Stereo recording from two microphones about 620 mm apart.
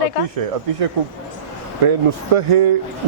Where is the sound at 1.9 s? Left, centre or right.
Right.